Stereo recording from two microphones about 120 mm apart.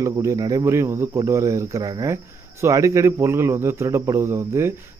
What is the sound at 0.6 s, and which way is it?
Speech, 20° right (ahead or behind).